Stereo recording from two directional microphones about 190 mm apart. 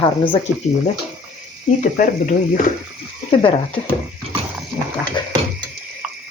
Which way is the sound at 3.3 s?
25° left (ahead or behind).